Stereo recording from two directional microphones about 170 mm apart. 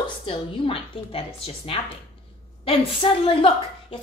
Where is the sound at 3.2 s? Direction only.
30° left (ahead or behind).